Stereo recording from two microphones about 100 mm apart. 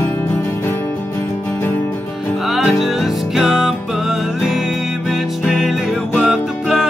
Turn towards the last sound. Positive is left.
turn(degrees=-5)  # may be behind; listen again after turning